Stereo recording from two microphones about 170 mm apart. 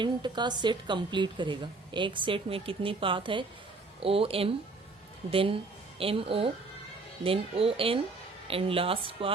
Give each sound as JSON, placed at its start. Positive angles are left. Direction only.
{"t": 0.0, "sound": "speech", "side_deg": -25}